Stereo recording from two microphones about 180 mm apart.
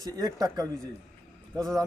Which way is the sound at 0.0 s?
20° right (ahead or behind).